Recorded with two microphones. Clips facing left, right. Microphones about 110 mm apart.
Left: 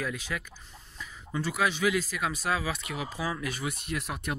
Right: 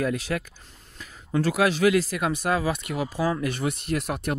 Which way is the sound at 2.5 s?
45° right (ahead or behind).